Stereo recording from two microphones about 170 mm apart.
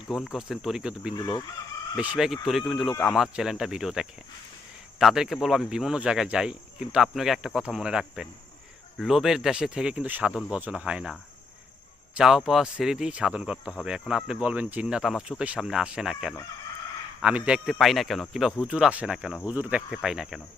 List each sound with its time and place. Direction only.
0.1 s speech: centre (ahead or behind)
1.1 s speech: 25° left (ahead or behind)
2.0 s speech: 5° right (ahead or behind)